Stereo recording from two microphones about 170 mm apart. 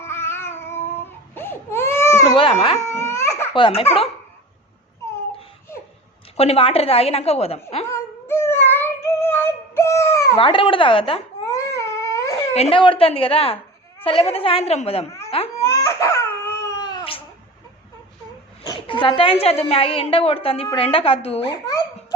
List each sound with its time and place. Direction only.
0.0 s cat: 15° left (ahead or behind)
0.9 s baby cry: 15° left (ahead or behind)
2.3 s speech: 35° left (ahead or behind)
2.9 s laughter: 15° left (ahead or behind)
3.5 s a woman's voice: 30° left (ahead or behind)
6.3 s a woman's voice: 35° left (ahead or behind)
7.9 s a sound: 15° left (ahead or behind)
10.3 s a woman's voice: 30° left (ahead or behind)
11.4 s dog: 15° left (ahead or behind)
12.5 s a woman's voice: 35° left (ahead or behind)
15.6 s baby cry: 15° left (ahead or behind)
18.6 s a woman's voice: 25° left (ahead or behind)